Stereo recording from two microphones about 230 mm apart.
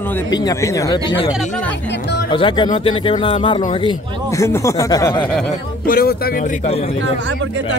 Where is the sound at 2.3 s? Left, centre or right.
Left.